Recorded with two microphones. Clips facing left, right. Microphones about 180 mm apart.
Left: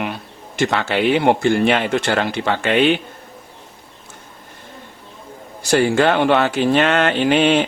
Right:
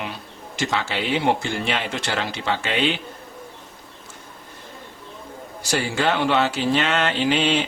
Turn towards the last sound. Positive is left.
turn(degrees=55)  # may be behind; listen again after turning